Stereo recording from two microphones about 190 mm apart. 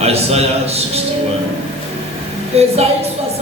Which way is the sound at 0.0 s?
35° right (ahead or behind).